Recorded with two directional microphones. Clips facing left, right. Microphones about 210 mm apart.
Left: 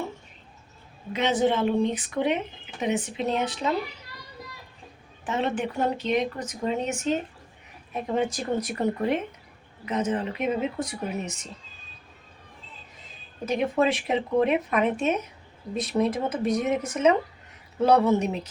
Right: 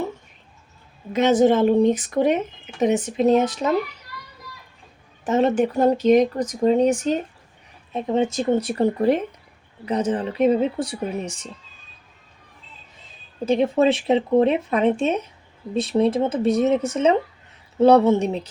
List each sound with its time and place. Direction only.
1.1 s speech: 45° right (ahead or behind)
5.2 s speech: 45° right (ahead or behind)
7.9 s speech: 25° right (ahead or behind)
13.4 s speech: 30° right (ahead or behind)